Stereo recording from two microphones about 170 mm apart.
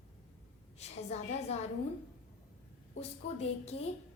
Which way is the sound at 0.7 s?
40° left (ahead or behind).